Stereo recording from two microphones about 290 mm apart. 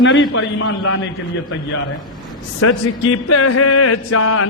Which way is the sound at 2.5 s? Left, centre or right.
Left.